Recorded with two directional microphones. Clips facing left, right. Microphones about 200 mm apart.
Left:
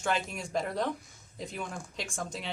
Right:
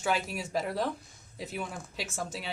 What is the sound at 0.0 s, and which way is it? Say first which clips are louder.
Speech: right 1 dB; 5° right (ahead or behind).